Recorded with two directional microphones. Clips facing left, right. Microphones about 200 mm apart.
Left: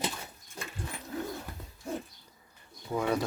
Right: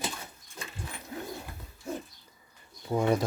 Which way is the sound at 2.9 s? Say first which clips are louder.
Right 3 dB; 25° right (ahead or behind).